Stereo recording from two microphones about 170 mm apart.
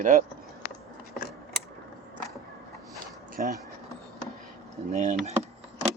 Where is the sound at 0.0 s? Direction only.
50° right (ahead or behind).